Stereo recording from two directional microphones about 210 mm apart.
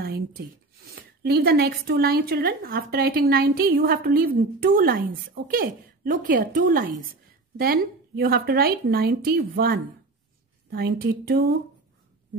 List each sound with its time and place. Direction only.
0.0 s speech: 50° right (ahead or behind)